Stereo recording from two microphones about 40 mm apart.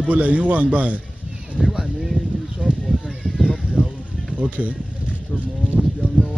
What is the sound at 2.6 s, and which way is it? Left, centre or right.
Horse, right.